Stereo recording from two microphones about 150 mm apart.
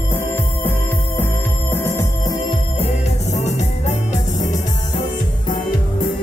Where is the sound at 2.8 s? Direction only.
45° left (ahead or behind).